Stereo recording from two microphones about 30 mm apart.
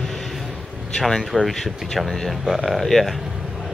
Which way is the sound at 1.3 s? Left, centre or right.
Left.